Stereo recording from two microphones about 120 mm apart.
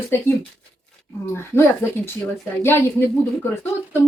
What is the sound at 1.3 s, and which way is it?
Speech, 20° left (ahead or behind).